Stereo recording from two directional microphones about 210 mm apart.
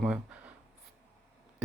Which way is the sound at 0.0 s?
5° right (ahead or behind).